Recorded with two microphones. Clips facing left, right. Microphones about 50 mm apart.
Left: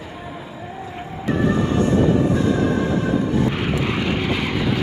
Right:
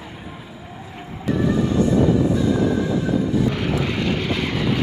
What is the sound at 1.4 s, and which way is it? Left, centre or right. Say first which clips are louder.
Music: even; left.